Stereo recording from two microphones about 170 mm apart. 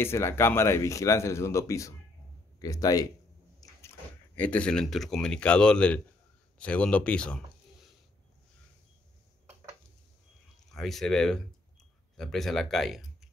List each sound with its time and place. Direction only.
0.0 s speech: 15° left (ahead or behind)
3.6 s a sound: 20° left (ahead or behind)
4.4 s speech: 10° left (ahead or behind)
10.7 s speech: centre (ahead or behind)